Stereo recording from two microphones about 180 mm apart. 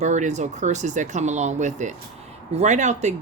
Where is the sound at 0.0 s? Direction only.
40° right (ahead or behind).